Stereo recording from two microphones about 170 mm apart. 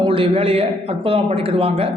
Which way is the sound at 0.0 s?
30° right (ahead or behind).